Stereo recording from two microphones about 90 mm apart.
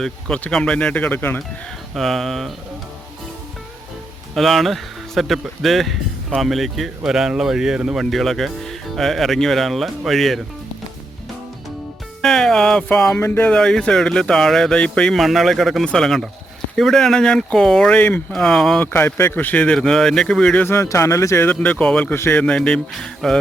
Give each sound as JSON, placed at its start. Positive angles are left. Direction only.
{"t": 0.0, "sound": "speech", "side_deg": 10}
{"t": 2.0, "sound": "speech", "side_deg": 0}
{"t": 4.4, "sound": "speech", "side_deg": 0}
{"t": 12.2, "sound": "speech", "side_deg": 5}
{"t": 13.1, "sound": "speech", "side_deg": 25}
{"t": 13.5, "sound": "speech", "side_deg": 5}
{"t": 15.1, "sound": "speech", "side_deg": 0}
{"t": 18.8, "sound": "speech", "side_deg": 25}
{"t": 20.6, "sound": "speech", "side_deg": 30}
{"t": 21.4, "sound": "speech", "side_deg": 20}
{"t": 22.1, "sound": "speech", "side_deg": 25}
{"t": 22.4, "sound": "speech", "side_deg": 10}